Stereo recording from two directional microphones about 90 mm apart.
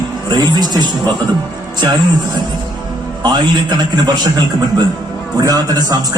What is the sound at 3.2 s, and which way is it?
A man's voice, 50° right (ahead or behind).